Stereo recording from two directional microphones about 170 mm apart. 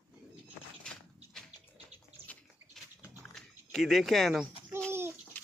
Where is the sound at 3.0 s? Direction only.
Centre (ahead or behind).